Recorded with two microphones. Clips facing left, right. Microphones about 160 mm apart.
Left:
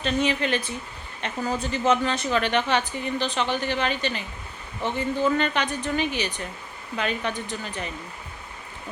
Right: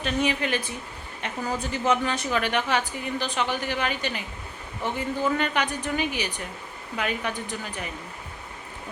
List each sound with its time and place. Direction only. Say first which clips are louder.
0.0 s a woman's voice: left 1 dB; 10° right (ahead or behind)